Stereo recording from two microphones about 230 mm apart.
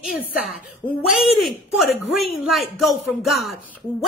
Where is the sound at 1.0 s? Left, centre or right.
Centre.